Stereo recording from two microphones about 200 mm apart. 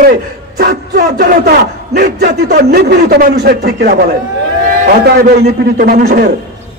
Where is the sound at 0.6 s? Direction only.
50° right (ahead or behind).